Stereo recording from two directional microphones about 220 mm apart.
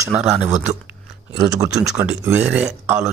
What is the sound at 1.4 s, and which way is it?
Speech, 15° right (ahead or behind).